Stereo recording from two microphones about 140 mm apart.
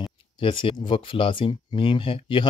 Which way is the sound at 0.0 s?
40° left (ahead or behind).